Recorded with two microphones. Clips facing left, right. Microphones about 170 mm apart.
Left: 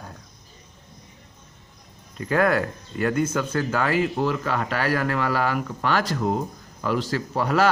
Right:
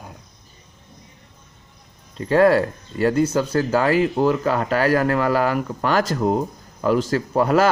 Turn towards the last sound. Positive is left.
turn(degrees=-45)  # may be behind; listen again after turning